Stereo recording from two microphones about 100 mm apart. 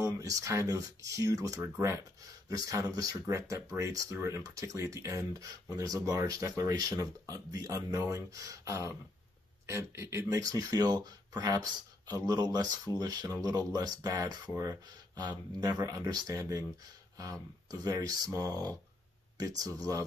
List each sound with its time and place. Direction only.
0.0 s speech: 35° right (ahead or behind)